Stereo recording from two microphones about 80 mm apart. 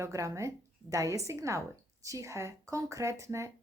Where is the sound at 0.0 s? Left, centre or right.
Right.